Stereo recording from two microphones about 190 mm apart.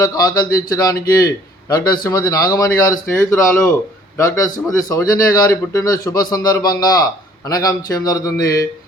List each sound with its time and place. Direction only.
0.0 s a man's voice: 20° left (ahead or behind)